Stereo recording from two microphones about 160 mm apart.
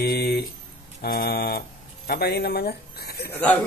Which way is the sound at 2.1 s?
90° left.